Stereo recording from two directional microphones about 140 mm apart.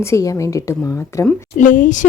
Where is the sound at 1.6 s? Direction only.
65° left (ahead or behind).